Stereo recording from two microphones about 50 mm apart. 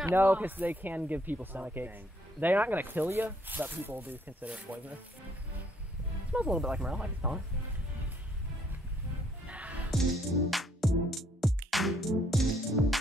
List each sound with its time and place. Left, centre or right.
0.0 s speech: right
4.7 s speech: right
6.3 s speech: right
9.5 s music: right
10.5 s music: centre